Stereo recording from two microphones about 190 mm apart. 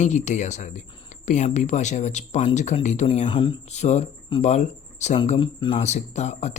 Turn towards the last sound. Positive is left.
turn(degrees=35)  # may be behind; listen again after turning